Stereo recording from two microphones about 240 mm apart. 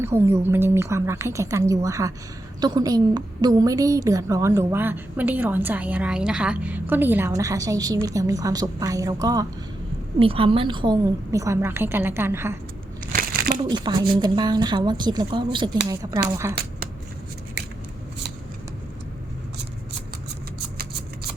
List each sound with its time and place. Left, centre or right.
0.0 s a woman's voice: centre
13.7 s a woman's voice: centre